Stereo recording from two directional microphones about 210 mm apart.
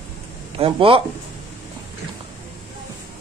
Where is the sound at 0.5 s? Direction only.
25° right (ahead or behind).